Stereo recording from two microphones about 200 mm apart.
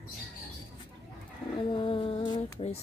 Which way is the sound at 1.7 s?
25° left (ahead or behind).